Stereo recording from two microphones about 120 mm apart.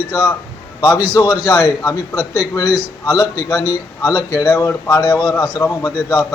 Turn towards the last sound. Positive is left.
turn(degrees=30)  # may be behind; listen again after turning